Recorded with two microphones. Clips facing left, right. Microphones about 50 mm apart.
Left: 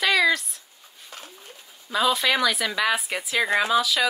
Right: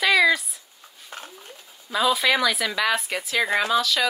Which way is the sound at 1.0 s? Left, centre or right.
Right.